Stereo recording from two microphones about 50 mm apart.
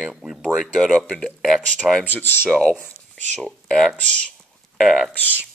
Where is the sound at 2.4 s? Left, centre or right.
Centre.